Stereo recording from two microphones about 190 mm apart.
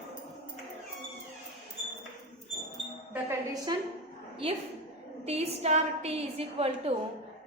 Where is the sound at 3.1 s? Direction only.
15° right (ahead or behind); by 6.9 s 30° right (ahead or behind).